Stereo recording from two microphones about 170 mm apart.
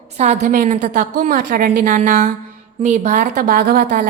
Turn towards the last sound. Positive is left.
turn(degrees=-65)  # may be behind; listen again after turning